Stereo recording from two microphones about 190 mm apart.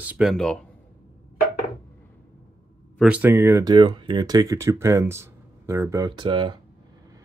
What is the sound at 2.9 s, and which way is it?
Speech, 5° right (ahead or behind).